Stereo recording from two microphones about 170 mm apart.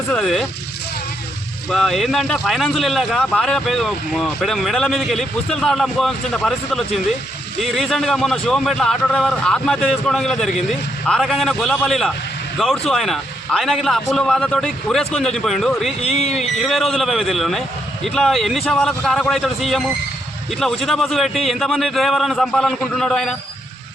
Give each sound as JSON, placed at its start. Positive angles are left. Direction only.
{"t": 0.1, "sound": "speech", "side_deg": 0}
{"t": 1.7, "sound": "speech", "side_deg": 0}
{"t": 16.0, "sound": "speech", "side_deg": 35}
{"t": 16.3, "sound": "speech", "side_deg": 0}